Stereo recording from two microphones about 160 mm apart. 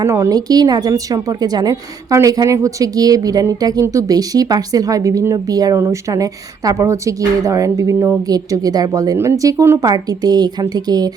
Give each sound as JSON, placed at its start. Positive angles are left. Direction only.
{"t": 0.0, "sound": "speech", "side_deg": -20}